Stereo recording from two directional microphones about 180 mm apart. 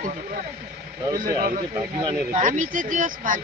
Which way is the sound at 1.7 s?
20° right (ahead or behind).